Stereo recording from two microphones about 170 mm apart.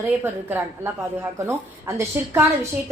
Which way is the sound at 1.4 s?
15° right (ahead or behind).